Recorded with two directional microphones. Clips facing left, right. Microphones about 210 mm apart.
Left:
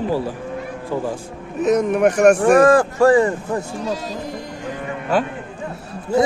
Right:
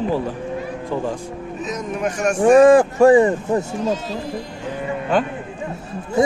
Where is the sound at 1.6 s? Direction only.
65° left (ahead or behind).